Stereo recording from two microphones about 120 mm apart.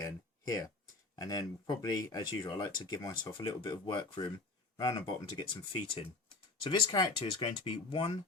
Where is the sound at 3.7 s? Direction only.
40° left (ahead or behind).